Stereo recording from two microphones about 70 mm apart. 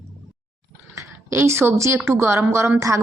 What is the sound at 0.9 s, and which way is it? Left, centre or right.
A woman's voice, right.